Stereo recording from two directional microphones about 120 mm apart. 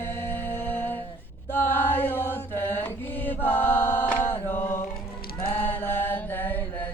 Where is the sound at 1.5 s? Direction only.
20° left (ahead or behind).